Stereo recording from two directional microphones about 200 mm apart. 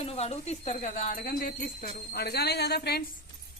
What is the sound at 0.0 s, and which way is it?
Speech, 30° left (ahead or behind).